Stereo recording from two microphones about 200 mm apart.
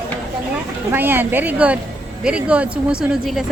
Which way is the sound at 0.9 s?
10° right (ahead or behind).